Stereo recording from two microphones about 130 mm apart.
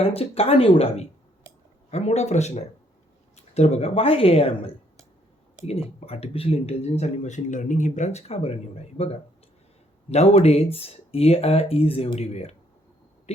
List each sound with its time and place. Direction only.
0.0 s speech: 50° left (ahead or behind)
6.0 s speech: 55° left (ahead or behind)
10.1 s speech: 55° left (ahead or behind)